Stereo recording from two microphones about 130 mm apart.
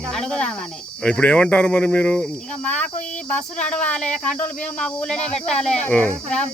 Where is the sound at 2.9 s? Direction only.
65° left (ahead or behind).